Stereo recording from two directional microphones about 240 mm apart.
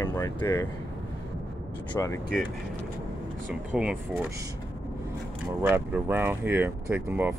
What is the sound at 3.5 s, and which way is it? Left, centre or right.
Speech, centre.